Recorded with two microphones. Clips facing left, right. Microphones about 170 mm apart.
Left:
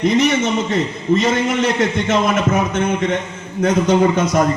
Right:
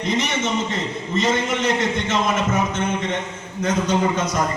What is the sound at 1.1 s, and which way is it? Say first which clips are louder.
A man's voice: left 5 dB; 55° left (ahead or behind).